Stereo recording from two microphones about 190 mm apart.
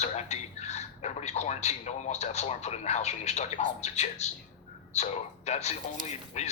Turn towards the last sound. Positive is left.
turn(degrees=35)  # may be behind; listen again after turning